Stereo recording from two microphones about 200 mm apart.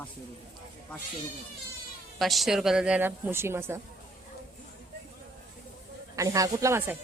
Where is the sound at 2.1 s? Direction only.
Centre (ahead or behind).